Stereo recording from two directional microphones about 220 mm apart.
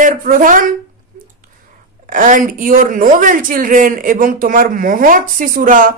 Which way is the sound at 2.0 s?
40° right (ahead or behind).